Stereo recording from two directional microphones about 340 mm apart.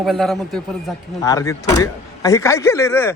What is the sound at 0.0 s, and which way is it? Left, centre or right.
A man's voice, centre.